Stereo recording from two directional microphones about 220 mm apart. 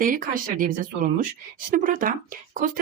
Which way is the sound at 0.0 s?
40° right (ahead or behind).